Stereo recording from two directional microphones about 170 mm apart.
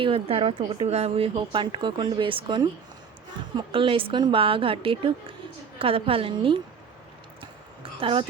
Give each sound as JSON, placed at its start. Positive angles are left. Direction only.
{"t": 0.0, "sound": "speech", "side_deg": -35}
{"t": 7.9, "sound": "speech", "side_deg": -30}